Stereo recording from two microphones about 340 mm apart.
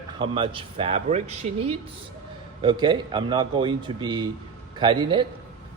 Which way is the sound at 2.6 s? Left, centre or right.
Centre.